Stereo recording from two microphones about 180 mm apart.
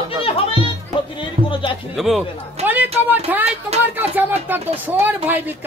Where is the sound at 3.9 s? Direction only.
10° right (ahead or behind).